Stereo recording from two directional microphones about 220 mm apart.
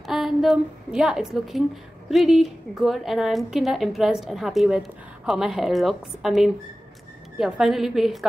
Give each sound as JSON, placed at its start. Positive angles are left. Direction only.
{"t": 0.0, "sound": "a woman's voice", "side_deg": 0}